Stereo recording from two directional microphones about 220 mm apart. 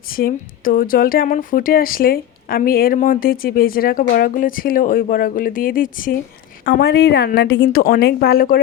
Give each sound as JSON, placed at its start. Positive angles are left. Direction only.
{"t": 0.1, "sound": "a woman's voice", "side_deg": 40}